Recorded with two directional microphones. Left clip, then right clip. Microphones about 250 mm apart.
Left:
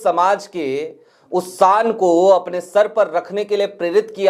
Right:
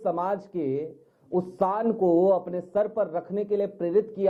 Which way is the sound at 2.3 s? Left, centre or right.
Centre.